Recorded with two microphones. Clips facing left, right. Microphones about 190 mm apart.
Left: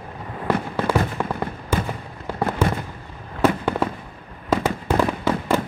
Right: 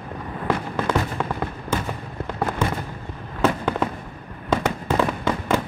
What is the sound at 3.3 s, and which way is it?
Fireworks, 10° left (ahead or behind).